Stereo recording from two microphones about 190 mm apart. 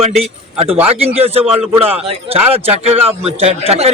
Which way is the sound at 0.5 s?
30° right (ahead or behind).